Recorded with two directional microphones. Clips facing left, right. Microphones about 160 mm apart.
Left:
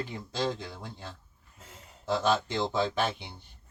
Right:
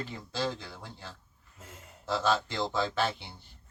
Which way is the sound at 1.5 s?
10° right (ahead or behind).